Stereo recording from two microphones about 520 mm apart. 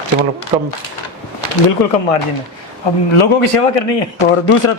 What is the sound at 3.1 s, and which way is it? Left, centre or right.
Speech, left.